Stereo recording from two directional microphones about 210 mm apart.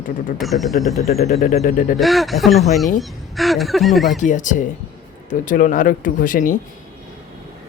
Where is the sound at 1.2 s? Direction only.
30° left (ahead or behind).